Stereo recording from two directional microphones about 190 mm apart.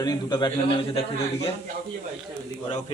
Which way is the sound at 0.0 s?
20° left (ahead or behind).